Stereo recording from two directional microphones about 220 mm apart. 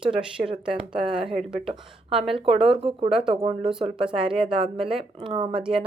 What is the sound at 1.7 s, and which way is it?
Speech, 25° right (ahead or behind).